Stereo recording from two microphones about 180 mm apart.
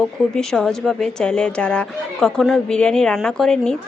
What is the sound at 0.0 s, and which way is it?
Speech, centre (ahead or behind).